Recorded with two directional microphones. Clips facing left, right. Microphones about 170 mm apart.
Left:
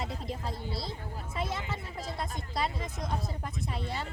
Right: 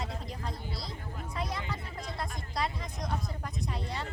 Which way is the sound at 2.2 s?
Centre (ahead or behind).